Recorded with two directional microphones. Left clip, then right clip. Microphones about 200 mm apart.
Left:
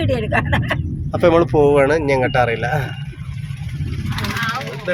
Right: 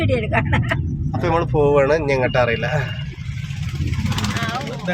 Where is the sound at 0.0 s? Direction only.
25° left (ahead or behind).